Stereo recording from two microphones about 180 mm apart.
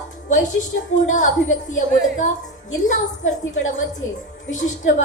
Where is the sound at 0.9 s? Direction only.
45° left (ahead or behind).